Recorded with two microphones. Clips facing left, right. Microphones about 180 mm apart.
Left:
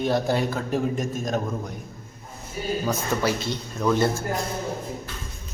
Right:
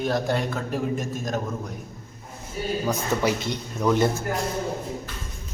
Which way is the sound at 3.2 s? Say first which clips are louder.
Right 1 dB; 20° right (ahead or behind).